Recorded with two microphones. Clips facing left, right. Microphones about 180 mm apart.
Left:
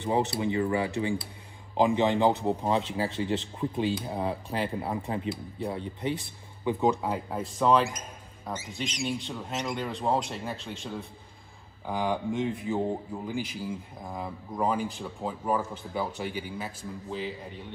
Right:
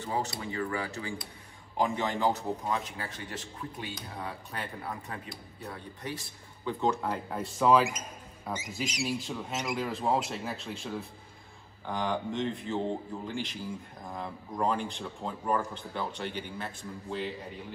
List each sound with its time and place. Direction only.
0.0 s a man's voice: 25° left (ahead or behind); by 17.7 s centre (ahead or behind)